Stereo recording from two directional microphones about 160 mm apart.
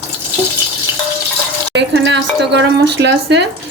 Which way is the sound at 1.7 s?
90° right.